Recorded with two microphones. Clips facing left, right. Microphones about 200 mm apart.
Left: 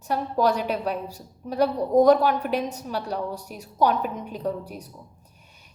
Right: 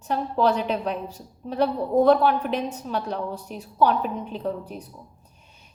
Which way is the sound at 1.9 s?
40° left (ahead or behind).